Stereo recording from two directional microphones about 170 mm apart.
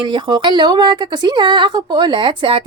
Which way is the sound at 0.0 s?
25° right (ahead or behind).